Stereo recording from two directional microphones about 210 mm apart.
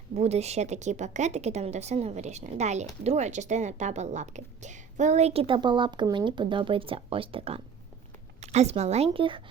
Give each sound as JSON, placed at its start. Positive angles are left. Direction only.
{"t": 0.2, "sound": "a woman's voice", "side_deg": -30}